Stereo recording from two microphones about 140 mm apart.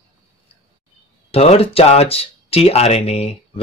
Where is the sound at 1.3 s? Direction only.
45° left (ahead or behind).